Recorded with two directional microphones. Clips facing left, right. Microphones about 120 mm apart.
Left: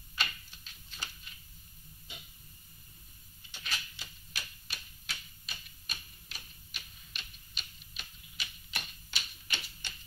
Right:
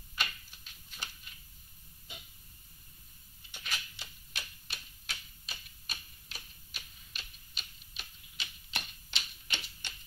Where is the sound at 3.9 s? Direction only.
20° right (ahead or behind).